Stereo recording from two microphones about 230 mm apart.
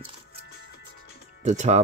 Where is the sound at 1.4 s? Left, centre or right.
Right.